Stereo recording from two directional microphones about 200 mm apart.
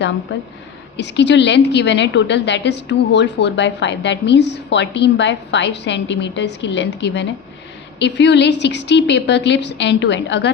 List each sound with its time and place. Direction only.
0.3 s a woman's voice: 65° left (ahead or behind)